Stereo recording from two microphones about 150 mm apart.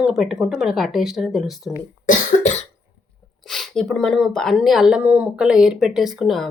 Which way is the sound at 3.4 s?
Centre (ahead or behind).